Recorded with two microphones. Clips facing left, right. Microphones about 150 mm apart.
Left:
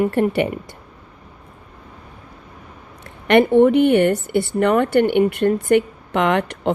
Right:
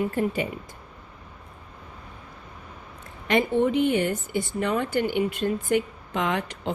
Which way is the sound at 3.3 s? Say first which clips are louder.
Left 9 dB; 65° left (ahead or behind).